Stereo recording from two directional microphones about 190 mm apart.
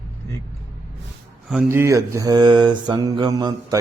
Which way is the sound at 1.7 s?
15° right (ahead or behind).